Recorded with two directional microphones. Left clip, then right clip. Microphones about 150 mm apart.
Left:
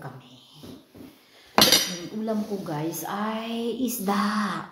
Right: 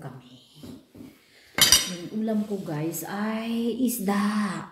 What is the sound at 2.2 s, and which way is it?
A woman's voice, 20° right (ahead or behind).